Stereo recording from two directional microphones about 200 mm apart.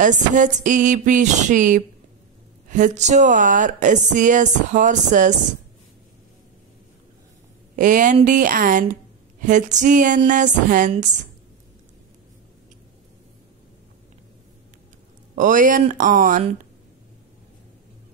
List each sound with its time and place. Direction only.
0.0 s speech: 40° right (ahead or behind)
7.7 s speech: 40° right (ahead or behind)
15.3 s speech: 40° right (ahead or behind)